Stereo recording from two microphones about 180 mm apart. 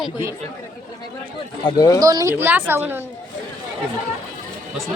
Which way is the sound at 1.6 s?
20° left (ahead or behind).